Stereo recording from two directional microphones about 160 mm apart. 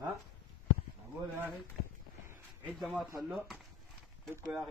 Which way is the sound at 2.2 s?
15° right (ahead or behind).